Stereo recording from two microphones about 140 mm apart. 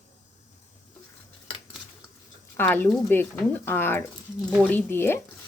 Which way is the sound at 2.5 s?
15° left (ahead or behind).